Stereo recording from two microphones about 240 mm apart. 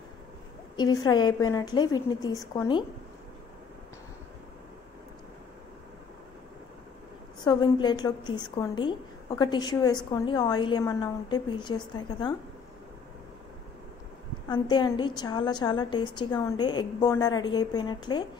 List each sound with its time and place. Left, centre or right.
0.7 s a woman's voice: centre
7.4 s a woman's voice: centre
14.5 s a woman's voice: centre